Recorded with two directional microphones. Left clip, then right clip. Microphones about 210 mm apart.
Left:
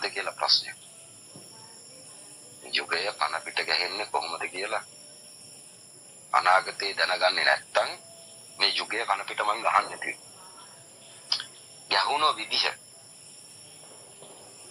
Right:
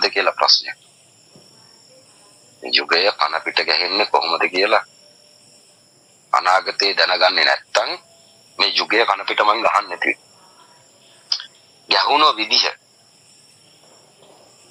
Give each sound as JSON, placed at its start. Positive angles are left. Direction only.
{"t": 0.0, "sound": "speech", "side_deg": -55}
{"t": 2.6, "sound": "speech", "side_deg": -55}
{"t": 6.3, "sound": "speech", "side_deg": -55}
{"t": 11.3, "sound": "a sound", "side_deg": -55}
{"t": 11.9, "sound": "speech", "side_deg": -55}